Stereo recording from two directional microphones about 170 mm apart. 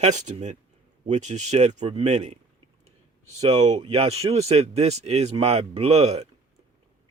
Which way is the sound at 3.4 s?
40° right (ahead or behind).